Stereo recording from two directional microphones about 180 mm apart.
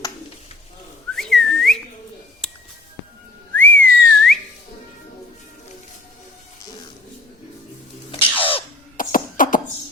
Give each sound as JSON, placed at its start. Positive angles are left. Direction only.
{"t": 1.1, "sound": "whistling", "side_deg": 0}
{"t": 2.4, "sound": "music", "side_deg": 5}
{"t": 3.5, "sound": "whistling", "side_deg": 10}
{"t": 8.1, "sound": "a sound", "side_deg": 30}
{"t": 9.0, "sound": "cough", "side_deg": 50}